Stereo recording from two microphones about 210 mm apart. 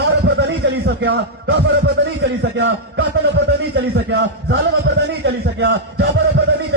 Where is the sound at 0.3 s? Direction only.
50° right (ahead or behind).